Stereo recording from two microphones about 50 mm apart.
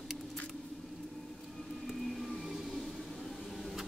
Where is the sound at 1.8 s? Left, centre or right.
Centre.